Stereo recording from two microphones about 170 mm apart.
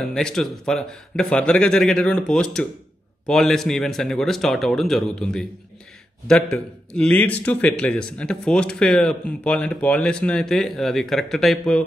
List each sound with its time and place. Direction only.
0.1 s a man's voice: 5° left (ahead or behind)